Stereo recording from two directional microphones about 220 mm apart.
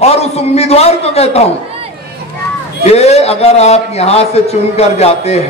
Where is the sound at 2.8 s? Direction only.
30° left (ahead or behind).